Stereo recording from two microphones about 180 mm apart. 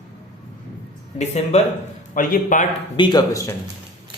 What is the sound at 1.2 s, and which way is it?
Speech, 40° left (ahead or behind).